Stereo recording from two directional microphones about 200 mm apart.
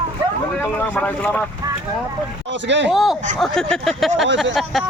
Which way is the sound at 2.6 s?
65° right (ahead or behind).